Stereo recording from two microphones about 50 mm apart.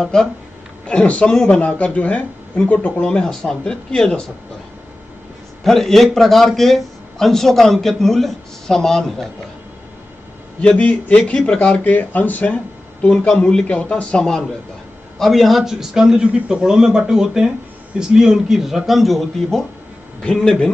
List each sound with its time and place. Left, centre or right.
0.0 s a man's voice: centre; by 3.1 s left
3.1 s a man's voice: centre
5.6 s a man's voice: centre
10.8 s speech: left
11.8 s speech: left
13.0 s a man's voice: centre
15.1 s a man's voice: centre
20.2 s a man's voice: centre